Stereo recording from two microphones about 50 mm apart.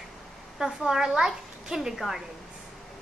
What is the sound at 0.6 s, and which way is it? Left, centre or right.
A child's voice, centre.